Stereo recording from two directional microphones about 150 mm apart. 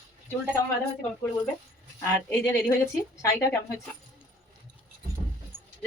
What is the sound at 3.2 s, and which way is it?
Speech, 20° left (ahead or behind).